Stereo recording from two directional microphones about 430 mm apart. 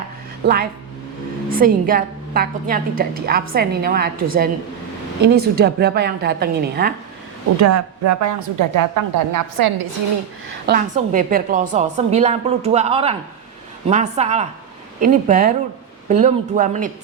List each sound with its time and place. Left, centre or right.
0.4 s a woman's voice: right
7.6 s a woman's voice: right
10.7 s a woman's voice: centre